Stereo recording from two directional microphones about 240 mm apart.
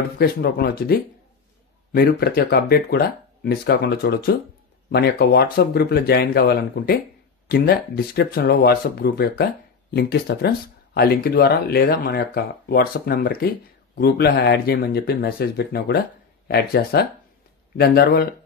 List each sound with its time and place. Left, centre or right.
0.2 s speech: left